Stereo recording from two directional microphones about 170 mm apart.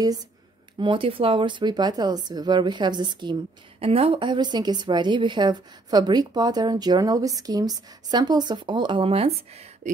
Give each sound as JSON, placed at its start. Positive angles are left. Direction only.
{"t": 0.7, "sound": "a woman's voice", "side_deg": -30}